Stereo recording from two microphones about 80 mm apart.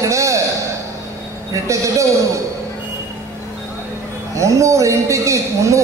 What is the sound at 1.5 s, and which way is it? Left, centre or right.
Speech, right.